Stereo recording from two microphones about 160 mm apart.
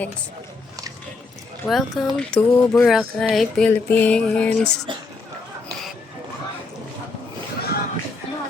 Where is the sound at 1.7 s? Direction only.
Centre (ahead or behind).